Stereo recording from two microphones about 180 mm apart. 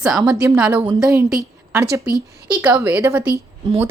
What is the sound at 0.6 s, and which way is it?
A woman's voice, 10° right (ahead or behind).